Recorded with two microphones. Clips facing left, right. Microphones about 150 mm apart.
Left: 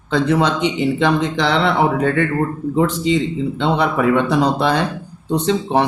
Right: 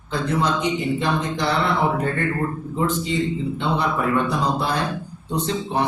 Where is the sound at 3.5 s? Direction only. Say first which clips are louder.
Left 7 dB; 75° left (ahead or behind).